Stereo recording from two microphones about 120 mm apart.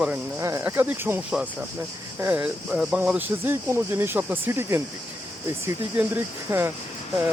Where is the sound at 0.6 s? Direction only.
15° right (ahead or behind).